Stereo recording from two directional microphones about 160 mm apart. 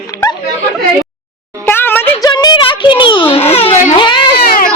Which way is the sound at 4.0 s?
30° left (ahead or behind).